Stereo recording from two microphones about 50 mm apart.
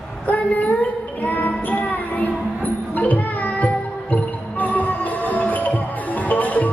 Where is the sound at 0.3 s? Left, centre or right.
Left.